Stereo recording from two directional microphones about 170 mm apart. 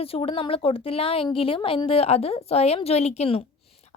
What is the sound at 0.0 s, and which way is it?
A woman's voice, 35° left (ahead or behind).